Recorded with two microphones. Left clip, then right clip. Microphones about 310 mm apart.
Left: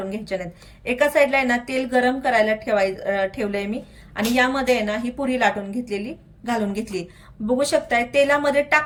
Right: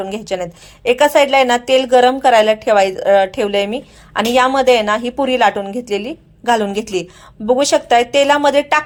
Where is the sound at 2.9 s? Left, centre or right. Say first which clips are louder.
Right 9 dB; right.